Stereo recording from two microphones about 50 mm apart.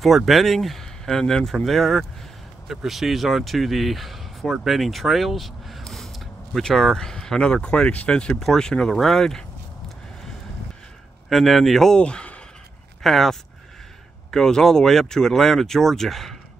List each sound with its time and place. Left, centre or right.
0.0 s speech: centre
2.7 s speech: centre
11.2 s speech: centre
12.0 s speech: left
13.0 s speech: centre